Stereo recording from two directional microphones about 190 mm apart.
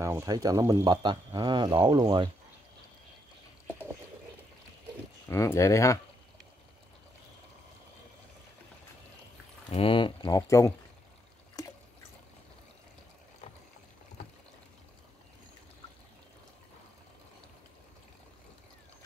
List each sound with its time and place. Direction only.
0.0 s speech: 15° right (ahead or behind)
3.6 s a sound: 10° right (ahead or behind)
5.3 s speech: 15° left (ahead or behind)
9.7 s speech: 30° left (ahead or behind)